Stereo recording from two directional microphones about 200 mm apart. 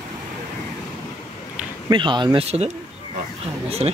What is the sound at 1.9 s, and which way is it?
Speech, 25° right (ahead or behind).